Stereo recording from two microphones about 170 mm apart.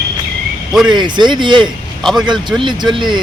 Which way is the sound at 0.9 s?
25° right (ahead or behind).